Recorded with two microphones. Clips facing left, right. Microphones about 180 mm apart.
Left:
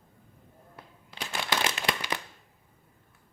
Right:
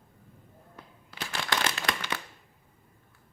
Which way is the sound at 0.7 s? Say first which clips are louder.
Even; 10° left (ahead or behind).